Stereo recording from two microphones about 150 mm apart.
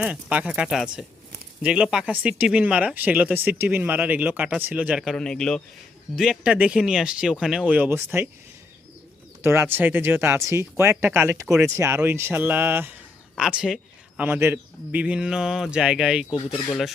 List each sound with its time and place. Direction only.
0.0 s speech: 10° right (ahead or behind)
5.1 s a man's voice: 5° left (ahead or behind); by 8.3 s 15° right (ahead or behind)
9.4 s a man's voice: 15° right (ahead or behind); by 16.9 s centre (ahead or behind)